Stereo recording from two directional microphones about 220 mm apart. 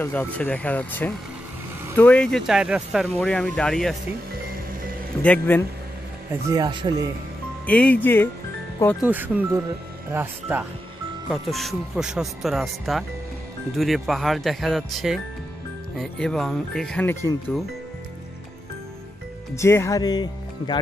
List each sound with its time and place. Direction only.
0.0 s speech: 10° left (ahead or behind)
5.2 s speech: 5° left (ahead or behind)
6.5 s speech: 20° right (ahead or behind)
7.6 s speech: 5° left (ahead or behind)
9.0 s speech: 5° right (ahead or behind); by 17.3 s 10° left (ahead or behind)
19.5 s speech: 10° left (ahead or behind)